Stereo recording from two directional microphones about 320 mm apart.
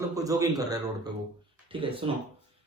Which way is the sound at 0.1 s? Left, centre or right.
Centre.